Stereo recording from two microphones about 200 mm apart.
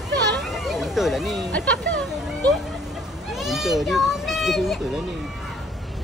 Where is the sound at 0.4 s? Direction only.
Centre (ahead or behind).